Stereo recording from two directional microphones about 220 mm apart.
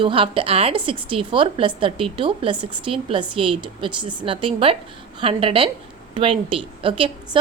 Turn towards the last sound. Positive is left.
turn(degrees=-20)  # may be behind; listen again after turning